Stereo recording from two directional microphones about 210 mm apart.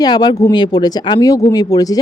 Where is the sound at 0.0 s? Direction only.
20° left (ahead or behind).